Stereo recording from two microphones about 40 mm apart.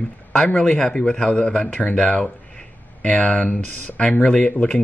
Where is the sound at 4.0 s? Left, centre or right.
Left.